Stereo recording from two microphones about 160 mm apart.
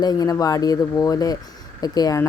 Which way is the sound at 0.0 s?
25° left (ahead or behind).